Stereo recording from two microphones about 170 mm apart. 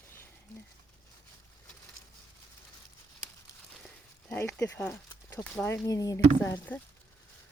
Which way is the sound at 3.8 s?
10° left (ahead or behind).